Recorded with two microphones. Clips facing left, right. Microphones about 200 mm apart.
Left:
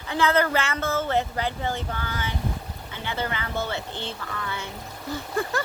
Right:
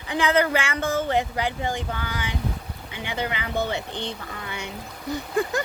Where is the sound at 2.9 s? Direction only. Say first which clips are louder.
Right 1 dB; 15° right (ahead or behind).